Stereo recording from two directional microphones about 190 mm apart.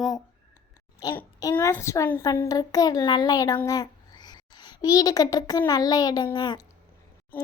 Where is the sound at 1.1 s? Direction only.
15° left (ahead or behind).